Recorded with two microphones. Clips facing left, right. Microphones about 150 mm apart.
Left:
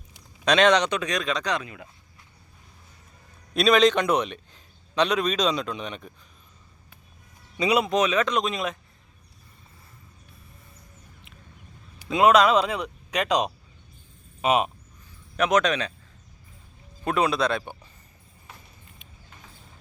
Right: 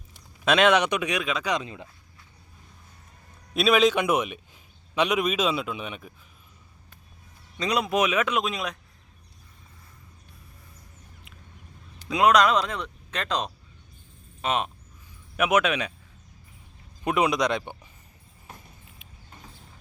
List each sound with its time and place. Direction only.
0.4 s a man's voice: 5° right (ahead or behind)
1.5 s speech: 25° right (ahead or behind)
3.5 s a man's voice: 5° right (ahead or behind)
7.5 s speech: 5° left (ahead or behind)
7.9 s a man's voice: 10° right (ahead or behind)
12.0 s speech: centre (ahead or behind)
15.4 s a man's voice: 10° right (ahead or behind)
17.0 s a man's voice: 15° right (ahead or behind)